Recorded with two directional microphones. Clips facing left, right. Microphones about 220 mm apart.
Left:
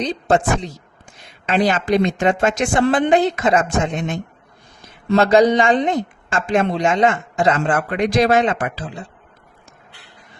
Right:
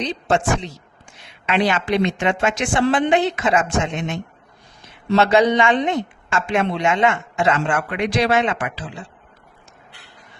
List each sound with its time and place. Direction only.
0.0 s speech: 40° left (ahead or behind)